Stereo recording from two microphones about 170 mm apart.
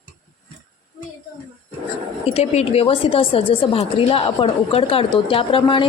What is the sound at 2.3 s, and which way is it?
A woman's voice, 40° left (ahead or behind).